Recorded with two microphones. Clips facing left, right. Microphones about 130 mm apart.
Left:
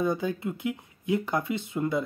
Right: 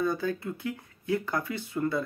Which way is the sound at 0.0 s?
20° left (ahead or behind).